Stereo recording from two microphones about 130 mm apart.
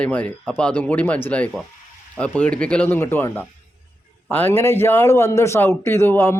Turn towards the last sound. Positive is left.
turn(degrees=15)  # may be behind; listen again after turning